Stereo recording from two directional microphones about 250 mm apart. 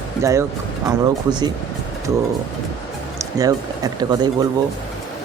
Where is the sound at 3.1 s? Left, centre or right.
Centre.